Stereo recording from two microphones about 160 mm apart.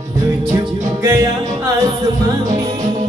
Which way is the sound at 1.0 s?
20° right (ahead or behind).